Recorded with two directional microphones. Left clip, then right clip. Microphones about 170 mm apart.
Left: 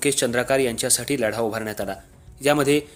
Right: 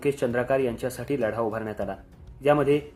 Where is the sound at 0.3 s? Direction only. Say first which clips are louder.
Left 3 dB; 35° left (ahead or behind).